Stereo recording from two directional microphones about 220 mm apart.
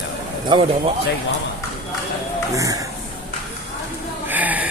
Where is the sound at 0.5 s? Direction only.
20° right (ahead or behind).